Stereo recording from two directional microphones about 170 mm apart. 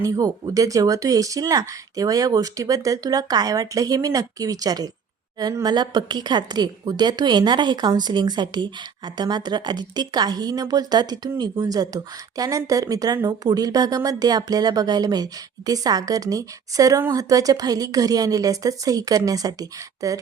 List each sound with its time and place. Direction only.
0.0 s a woman's voice: 20° right (ahead or behind)